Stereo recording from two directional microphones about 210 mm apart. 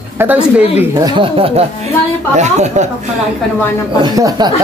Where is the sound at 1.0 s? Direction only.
20° right (ahead or behind).